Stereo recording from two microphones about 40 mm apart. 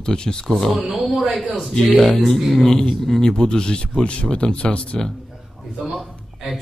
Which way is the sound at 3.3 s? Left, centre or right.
Centre.